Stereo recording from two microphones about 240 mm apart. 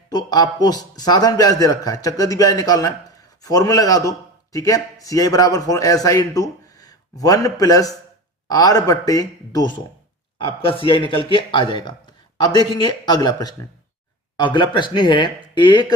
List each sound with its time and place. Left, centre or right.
0.1 s a man's voice: centre